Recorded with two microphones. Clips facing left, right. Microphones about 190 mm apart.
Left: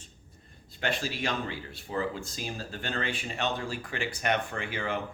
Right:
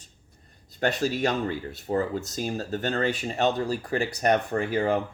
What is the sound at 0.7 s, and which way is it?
Speech, 40° right (ahead or behind).